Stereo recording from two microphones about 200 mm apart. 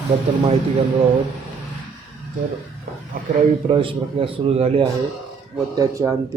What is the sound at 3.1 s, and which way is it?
Speech, 45° right (ahead or behind).